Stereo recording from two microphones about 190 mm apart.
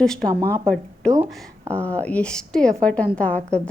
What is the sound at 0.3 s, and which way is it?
Speech, 15° right (ahead or behind).